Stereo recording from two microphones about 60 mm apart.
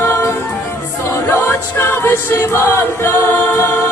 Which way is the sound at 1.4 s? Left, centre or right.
Left.